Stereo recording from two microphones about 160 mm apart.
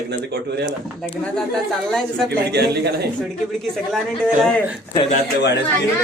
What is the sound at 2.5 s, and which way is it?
Speech, 90° right.